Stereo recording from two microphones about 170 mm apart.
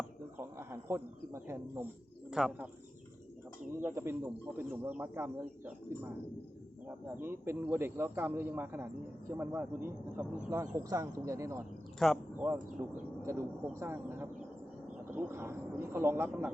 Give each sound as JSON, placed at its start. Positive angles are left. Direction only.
{"t": 0.3, "sound": "speech", "side_deg": -15}
{"t": 2.3, "sound": "speech", "side_deg": -5}
{"t": 3.7, "sound": "speech", "side_deg": -15}
{"t": 7.2, "sound": "speech", "side_deg": -15}
{"t": 11.9, "sound": "speech", "side_deg": 0}
{"t": 12.8, "sound": "speech", "side_deg": -10}